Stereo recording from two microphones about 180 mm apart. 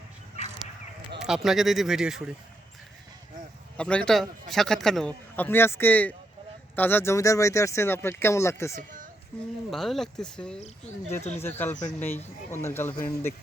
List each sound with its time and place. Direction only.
0.4 s a sound: 40° left (ahead or behind)
1.2 s a man's voice: centre (ahead or behind)
3.8 s a man's voice: 5° left (ahead or behind)
9.6 s a man's voice: centre (ahead or behind)
11.2 s speech: 40° left (ahead or behind)
11.4 s speech: 10° left (ahead or behind)
11.7 s speech: 40° left (ahead or behind)
11.9 s speech: 10° left (ahead or behind)